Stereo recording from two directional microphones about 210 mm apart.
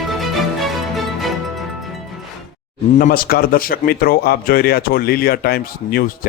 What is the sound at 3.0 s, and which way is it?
Speech, 45° left (ahead or behind).